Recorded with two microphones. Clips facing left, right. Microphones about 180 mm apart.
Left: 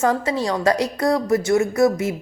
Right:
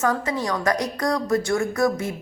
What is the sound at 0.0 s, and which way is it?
Speech, 30° left (ahead or behind).